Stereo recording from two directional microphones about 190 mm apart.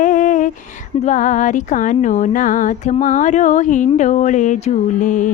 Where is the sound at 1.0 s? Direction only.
40° left (ahead or behind).